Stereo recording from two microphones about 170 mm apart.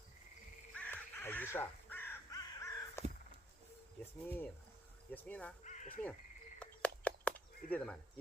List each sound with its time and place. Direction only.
0.8 s crow: 10° left (ahead or behind)
4.0 s speech: 10° left (ahead or behind)
5.6 s crow: 45° left (ahead or behind)
6.6 s a sound: 10° left (ahead or behind)